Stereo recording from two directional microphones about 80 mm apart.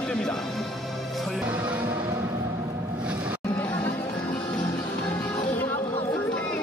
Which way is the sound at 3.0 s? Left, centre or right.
Centre.